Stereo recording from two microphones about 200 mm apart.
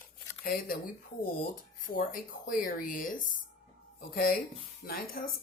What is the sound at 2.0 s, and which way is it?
Speech, 45° left (ahead or behind).